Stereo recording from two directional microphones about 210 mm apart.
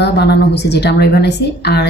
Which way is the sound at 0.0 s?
55° left (ahead or behind).